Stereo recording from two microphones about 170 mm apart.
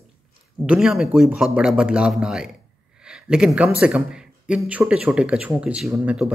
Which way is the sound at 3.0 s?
5° right (ahead or behind).